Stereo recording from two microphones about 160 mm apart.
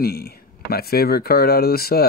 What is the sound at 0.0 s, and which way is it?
Speech, 75° left (ahead or behind).